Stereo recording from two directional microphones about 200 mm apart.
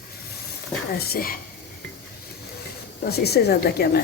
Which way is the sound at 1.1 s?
45° left (ahead or behind).